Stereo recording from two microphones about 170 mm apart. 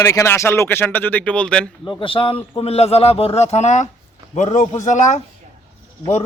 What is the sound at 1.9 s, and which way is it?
A man's voice, 30° left (ahead or behind).